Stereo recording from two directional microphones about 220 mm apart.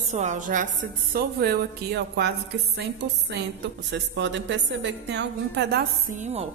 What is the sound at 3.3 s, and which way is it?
A woman's voice, 55° right (ahead or behind).